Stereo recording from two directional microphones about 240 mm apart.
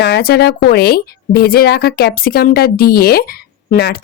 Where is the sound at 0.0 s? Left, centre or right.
Left.